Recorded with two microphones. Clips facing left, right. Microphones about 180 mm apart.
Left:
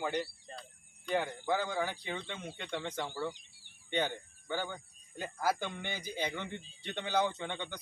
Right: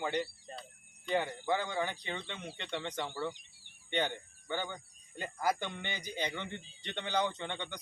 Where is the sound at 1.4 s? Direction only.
5° left (ahead or behind).